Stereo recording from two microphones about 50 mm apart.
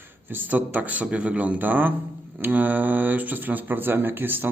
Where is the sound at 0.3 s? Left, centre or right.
Right.